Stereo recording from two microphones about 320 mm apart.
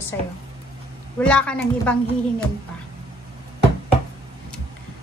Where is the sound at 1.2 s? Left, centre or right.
Centre.